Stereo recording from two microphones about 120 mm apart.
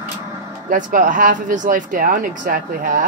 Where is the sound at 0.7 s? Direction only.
90° right.